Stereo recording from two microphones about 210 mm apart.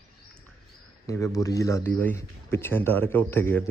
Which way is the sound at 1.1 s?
15° left (ahead or behind).